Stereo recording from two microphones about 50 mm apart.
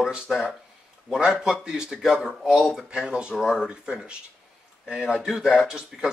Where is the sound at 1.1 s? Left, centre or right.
Centre.